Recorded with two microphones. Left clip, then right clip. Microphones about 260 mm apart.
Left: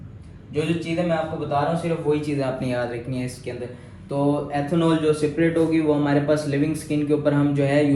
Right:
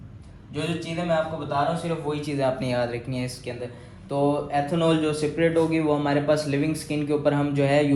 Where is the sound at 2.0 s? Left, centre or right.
Right.